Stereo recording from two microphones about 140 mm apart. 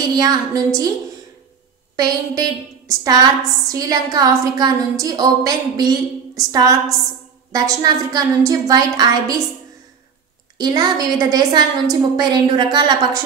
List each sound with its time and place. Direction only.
0.1 s a woman's voice: 25° right (ahead or behind)
2.0 s a woman's voice: 30° right (ahead or behind)
10.6 s a woman's voice: 30° right (ahead or behind)